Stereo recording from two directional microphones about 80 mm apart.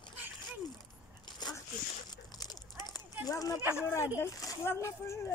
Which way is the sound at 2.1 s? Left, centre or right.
Left.